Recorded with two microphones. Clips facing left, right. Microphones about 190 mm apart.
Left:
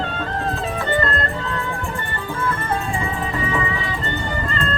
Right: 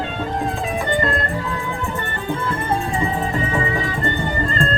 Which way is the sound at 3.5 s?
40° right (ahead or behind).